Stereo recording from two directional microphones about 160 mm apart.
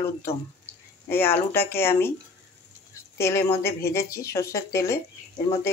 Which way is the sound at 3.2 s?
15° left (ahead or behind).